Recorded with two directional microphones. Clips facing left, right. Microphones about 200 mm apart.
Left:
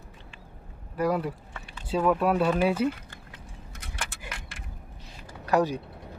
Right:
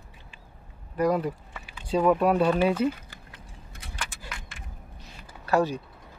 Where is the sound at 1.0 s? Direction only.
5° left (ahead or behind).